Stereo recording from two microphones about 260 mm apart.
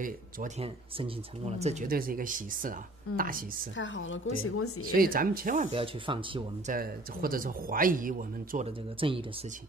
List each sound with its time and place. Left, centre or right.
0.0 s speech: right
3.7 s a woman's voice: left
4.9 s speech: right
6.7 s speech: right